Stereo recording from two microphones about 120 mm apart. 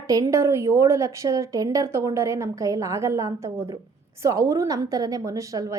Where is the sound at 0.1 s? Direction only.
25° right (ahead or behind).